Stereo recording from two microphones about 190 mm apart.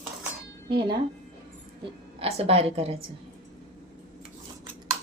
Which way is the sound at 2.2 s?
30° right (ahead or behind).